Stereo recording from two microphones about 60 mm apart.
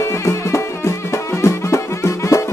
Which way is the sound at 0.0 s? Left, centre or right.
Left.